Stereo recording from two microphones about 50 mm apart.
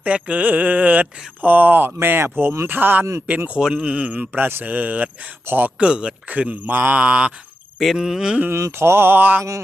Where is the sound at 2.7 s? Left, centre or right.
Right.